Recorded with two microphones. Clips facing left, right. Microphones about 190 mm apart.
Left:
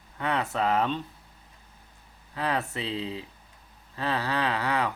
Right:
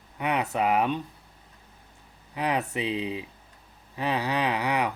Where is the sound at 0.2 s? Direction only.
15° right (ahead or behind).